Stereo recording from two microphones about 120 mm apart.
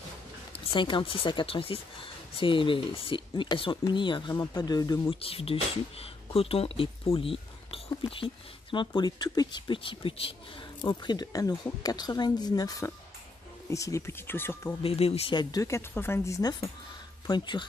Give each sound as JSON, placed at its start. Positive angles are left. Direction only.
{"t": 0.5, "sound": "speech", "side_deg": 45}
{"t": 5.1, "sound": "speech", "side_deg": 50}
{"t": 14.8, "sound": "speech", "side_deg": 55}
{"t": 15.3, "sound": "speech", "side_deg": 30}
{"t": 17.3, "sound": "speech", "side_deg": 40}